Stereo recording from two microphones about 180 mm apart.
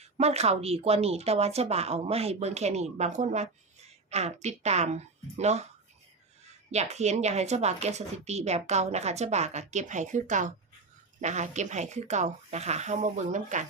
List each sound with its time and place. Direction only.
0.0 s speech: 35° right (ahead or behind)
6.7 s speech: 40° right (ahead or behind)